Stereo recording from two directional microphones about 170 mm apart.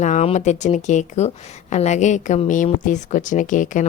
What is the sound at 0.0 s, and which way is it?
Speech, 45° left (ahead or behind).